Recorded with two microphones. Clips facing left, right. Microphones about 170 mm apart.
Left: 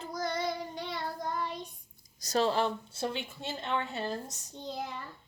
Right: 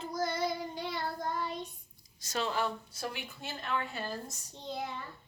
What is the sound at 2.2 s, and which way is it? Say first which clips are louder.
A woman's voice: left 5 dB; 35° left (ahead or behind).